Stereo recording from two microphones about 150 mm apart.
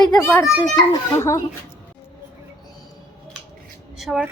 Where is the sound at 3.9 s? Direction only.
Centre (ahead or behind).